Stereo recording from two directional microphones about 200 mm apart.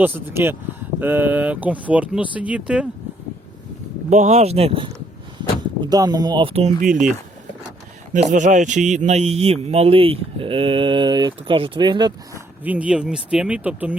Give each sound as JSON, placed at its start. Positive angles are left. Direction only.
{"t": 0.0, "sound": "speech", "side_deg": -10}
{"t": 4.1, "sound": "a man's voice", "side_deg": -35}
{"t": 8.1, "sound": "a man's voice", "side_deg": -40}
{"t": 12.6, "sound": "speech", "side_deg": -5}